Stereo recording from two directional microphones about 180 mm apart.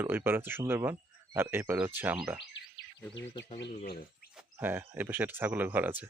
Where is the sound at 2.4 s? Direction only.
90° left.